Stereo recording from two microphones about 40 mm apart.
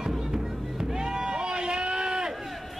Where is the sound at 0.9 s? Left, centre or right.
Centre.